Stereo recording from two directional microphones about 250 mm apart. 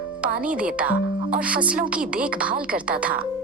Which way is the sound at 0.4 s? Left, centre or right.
Centre.